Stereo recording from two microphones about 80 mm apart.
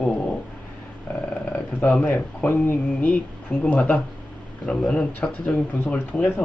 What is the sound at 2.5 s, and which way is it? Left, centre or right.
Speech, left.